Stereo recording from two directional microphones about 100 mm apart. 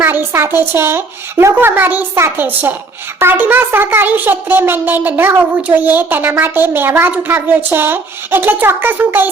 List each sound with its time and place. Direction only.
0.0 s speech: 20° right (ahead or behind)